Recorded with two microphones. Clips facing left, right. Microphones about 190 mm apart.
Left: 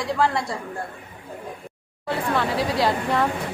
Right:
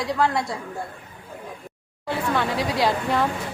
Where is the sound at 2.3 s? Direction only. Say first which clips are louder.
Left 1 dB; centre (ahead or behind).